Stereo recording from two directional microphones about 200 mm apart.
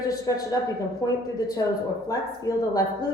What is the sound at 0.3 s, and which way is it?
Speech, 20° left (ahead or behind).